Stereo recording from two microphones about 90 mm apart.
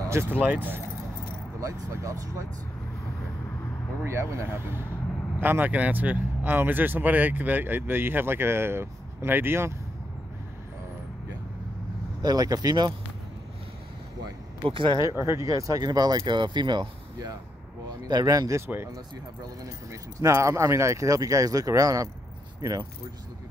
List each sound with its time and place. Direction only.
0.0 s keys jangling: 30° right (ahead or behind)
0.3 s speech: 20° right (ahead or behind)
1.6 s speech: 35° right (ahead or behind)
4.0 s speech: 30° right (ahead or behind)
12.2 s speech: 45° right (ahead or behind)
14.6 s speech: 65° right (ahead or behind)
15.1 s speech: 30° right (ahead or behind)
19.6 s speech: 35° right (ahead or behind)